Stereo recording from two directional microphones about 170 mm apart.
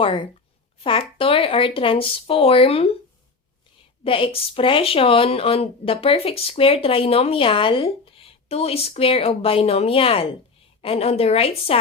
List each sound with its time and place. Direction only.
0.0 s speech: 30° left (ahead or behind)
4.0 s speech: 30° left (ahead or behind)